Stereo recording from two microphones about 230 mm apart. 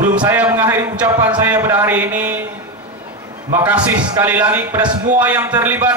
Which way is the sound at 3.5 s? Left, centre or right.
Centre.